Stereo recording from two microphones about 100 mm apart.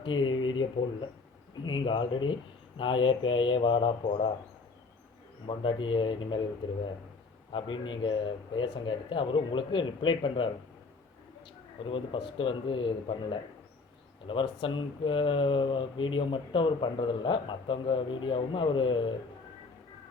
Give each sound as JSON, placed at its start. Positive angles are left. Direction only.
{"t": 0.0, "sound": "speech", "side_deg": 55}
{"t": 5.5, "sound": "speech", "side_deg": 55}
{"t": 7.5, "sound": "speech", "side_deg": 60}
{"t": 11.9, "sound": "speech", "side_deg": 60}
{"t": 14.3, "sound": "speech", "side_deg": 60}